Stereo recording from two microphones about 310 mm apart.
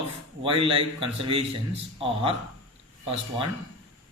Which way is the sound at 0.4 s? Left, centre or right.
Centre.